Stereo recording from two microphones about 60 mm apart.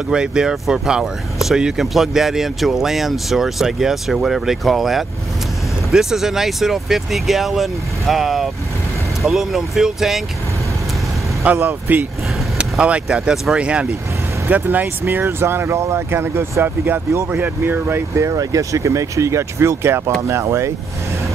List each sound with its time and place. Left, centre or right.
0.1 s speech: centre
11.6 s speech: right
12.5 s speech: centre
14.5 s speech: right
18.1 s speech: right
20.2 s speech: right